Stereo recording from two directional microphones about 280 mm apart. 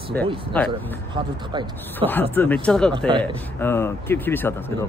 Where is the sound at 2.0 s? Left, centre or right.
Centre.